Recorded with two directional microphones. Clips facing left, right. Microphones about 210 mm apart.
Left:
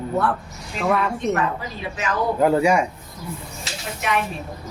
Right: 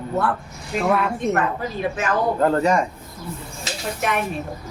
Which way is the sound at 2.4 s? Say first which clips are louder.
Left 3 dB; 10° left (ahead or behind).